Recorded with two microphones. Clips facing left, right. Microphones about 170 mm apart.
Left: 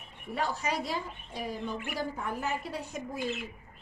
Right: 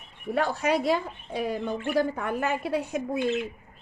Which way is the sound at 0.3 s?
60° right (ahead or behind).